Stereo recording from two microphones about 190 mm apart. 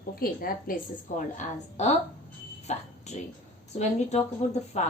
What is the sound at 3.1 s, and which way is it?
A woman's voice, 35° left (ahead or behind).